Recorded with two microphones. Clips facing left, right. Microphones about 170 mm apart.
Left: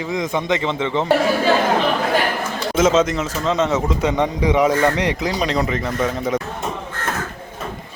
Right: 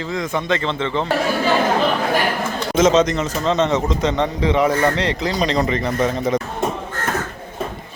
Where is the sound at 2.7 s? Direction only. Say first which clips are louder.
Right 1 dB; 5° left (ahead or behind).